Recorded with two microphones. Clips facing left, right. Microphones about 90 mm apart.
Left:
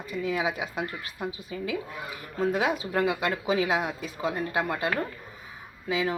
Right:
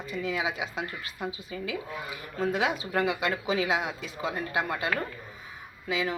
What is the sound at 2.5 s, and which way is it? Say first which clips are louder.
Speech: even; 45° left (ahead or behind).